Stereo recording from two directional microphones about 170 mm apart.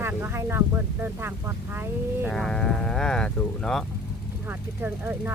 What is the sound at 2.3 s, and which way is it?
Speech, 5° left (ahead or behind).